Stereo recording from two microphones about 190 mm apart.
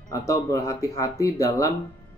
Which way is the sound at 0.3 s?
15° left (ahead or behind).